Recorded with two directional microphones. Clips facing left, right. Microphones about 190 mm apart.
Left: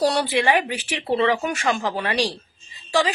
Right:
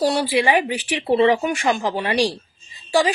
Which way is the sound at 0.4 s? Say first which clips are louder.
Right 2 dB; 15° right (ahead or behind).